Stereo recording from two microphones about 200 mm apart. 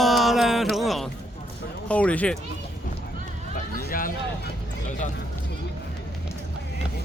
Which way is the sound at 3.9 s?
45° left (ahead or behind).